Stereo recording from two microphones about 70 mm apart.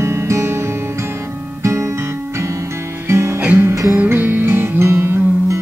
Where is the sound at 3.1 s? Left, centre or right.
Right.